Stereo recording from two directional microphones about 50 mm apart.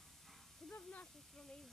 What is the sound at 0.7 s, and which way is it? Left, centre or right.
Snake, left.